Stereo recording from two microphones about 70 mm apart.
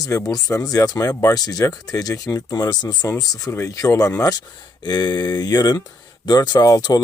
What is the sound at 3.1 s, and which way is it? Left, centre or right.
Speech, left.